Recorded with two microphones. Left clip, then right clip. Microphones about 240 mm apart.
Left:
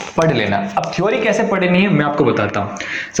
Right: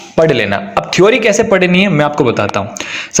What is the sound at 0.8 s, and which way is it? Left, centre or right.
Speech, right.